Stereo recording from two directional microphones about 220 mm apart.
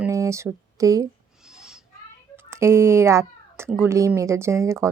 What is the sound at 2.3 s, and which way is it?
A woman's voice, 10° right (ahead or behind).